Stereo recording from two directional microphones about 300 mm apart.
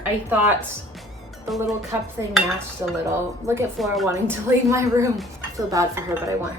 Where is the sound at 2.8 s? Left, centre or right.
Centre.